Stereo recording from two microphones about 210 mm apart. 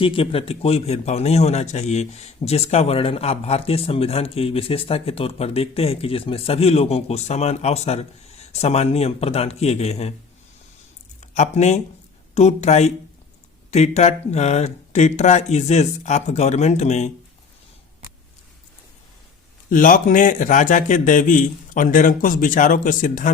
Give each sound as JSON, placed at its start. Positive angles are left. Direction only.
{"t": 0.0, "sound": "a man's voice", "side_deg": 25}
{"t": 11.2, "sound": "speech", "side_deg": 30}
{"t": 19.7, "sound": "speech", "side_deg": 40}